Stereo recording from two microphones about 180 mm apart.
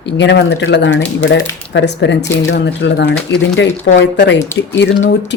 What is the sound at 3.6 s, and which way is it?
Speech, 85° left.